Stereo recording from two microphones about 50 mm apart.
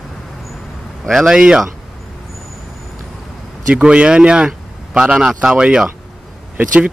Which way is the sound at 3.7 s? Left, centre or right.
Right.